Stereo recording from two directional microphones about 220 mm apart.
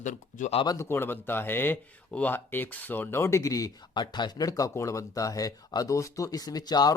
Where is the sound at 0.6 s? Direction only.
15° left (ahead or behind).